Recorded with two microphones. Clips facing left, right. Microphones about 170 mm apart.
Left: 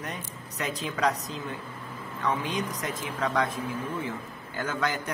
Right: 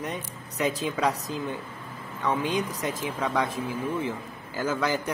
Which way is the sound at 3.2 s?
10° right (ahead or behind).